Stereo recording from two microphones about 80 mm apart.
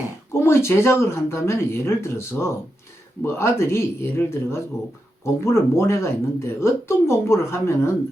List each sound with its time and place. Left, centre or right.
0.3 s speech: left